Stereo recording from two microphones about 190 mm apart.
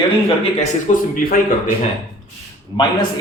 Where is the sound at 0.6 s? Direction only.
45° left (ahead or behind).